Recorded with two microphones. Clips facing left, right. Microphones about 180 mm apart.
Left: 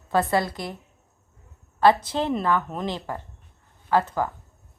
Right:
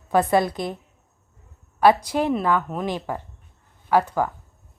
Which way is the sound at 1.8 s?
15° right (ahead or behind).